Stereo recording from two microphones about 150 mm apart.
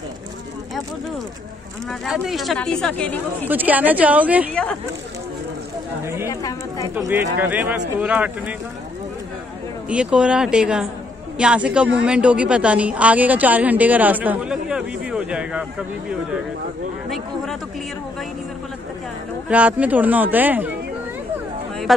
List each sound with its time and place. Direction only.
1.9 s speech: centre (ahead or behind)
3.4 s a woman's voice: 10° right (ahead or behind)
6.2 s a woman's voice: 25° left (ahead or behind)
7.0 s a woman's voice: 15° right (ahead or behind)
9.8 s a woman's voice: 5° right (ahead or behind)
19.5 s a woman's voice: 10° right (ahead or behind)